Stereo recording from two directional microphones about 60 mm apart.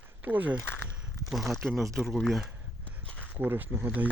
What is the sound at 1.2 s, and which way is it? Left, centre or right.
Speech, centre.